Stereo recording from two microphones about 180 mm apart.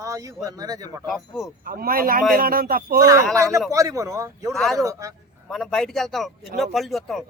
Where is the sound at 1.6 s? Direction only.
50° right (ahead or behind).